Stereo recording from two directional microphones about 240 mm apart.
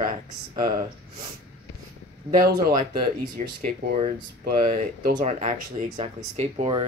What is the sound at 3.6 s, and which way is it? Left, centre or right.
Speech, right.